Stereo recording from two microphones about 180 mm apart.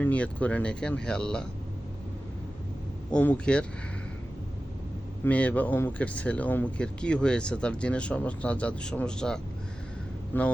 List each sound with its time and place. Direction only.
0.0 s speech: 10° left (ahead or behind)
3.1 s a man's voice: 5° left (ahead or behind)
5.2 s speech: 10° left (ahead or behind)